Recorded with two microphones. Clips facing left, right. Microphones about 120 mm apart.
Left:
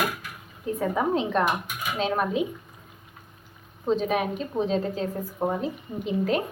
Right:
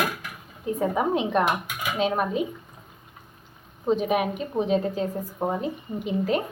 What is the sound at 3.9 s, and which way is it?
A woman's voice, 10° right (ahead or behind).